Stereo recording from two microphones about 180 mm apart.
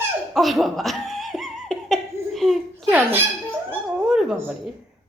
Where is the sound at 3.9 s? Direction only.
5° right (ahead or behind).